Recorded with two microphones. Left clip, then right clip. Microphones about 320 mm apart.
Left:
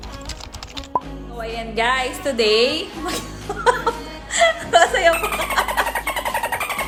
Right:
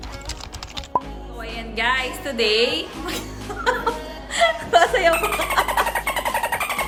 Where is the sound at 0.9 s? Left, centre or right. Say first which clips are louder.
Even; centre.